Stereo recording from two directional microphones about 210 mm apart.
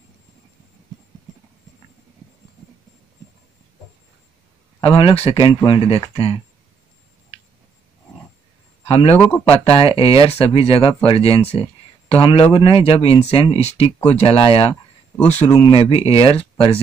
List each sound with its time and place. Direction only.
4.8 s speech: 25° left (ahead or behind)
8.8 s a man's voice: 30° left (ahead or behind)